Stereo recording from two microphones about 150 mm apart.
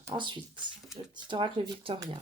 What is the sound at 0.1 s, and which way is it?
Speech, 30° right (ahead or behind).